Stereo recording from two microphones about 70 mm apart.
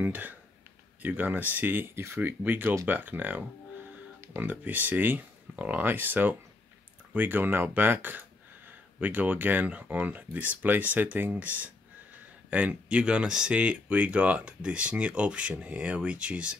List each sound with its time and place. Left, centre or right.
0.0 s speech: right